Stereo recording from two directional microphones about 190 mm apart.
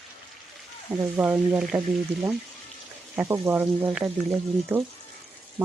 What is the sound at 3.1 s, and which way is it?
Speech, 15° right (ahead or behind).